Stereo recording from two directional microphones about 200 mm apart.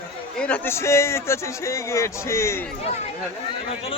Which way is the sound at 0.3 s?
5° left (ahead or behind).